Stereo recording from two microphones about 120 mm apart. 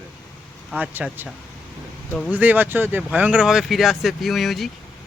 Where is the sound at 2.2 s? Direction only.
15° right (ahead or behind).